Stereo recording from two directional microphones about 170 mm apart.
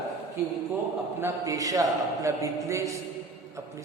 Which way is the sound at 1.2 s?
20° right (ahead or behind).